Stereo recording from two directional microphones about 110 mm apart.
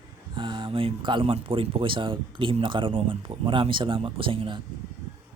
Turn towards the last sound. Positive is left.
turn(degrees=-50)  # may be behind; listen again after turning